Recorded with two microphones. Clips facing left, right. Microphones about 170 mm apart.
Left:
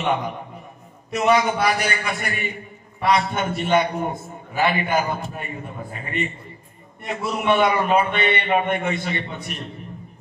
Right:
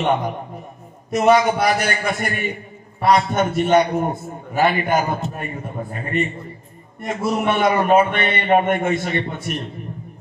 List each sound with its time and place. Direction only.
1.1 s a man's voice: 40° right (ahead or behind)